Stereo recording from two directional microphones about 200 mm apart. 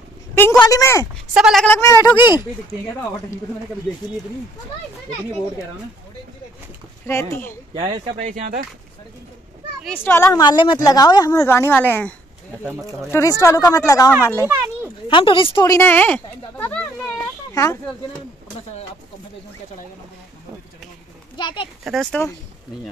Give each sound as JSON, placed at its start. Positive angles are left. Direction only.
{"t": 0.3, "sound": "a woman's voice", "side_deg": 10}
{"t": 1.3, "sound": "speech", "side_deg": 0}
{"t": 1.7, "sound": "a woman's voice", "side_deg": 15}
{"t": 7.1, "sound": "a woman's voice", "side_deg": 15}
{"t": 7.7, "sound": "speech", "side_deg": -25}
{"t": 9.8, "sound": "a woman's voice", "side_deg": 10}
{"t": 13.1, "sound": "a woman's voice", "side_deg": 15}
{"t": 15.0, "sound": "a woman's voice", "side_deg": 25}
{"t": 21.4, "sound": "a child's voice", "side_deg": 25}
{"t": 21.8, "sound": "speech", "side_deg": 0}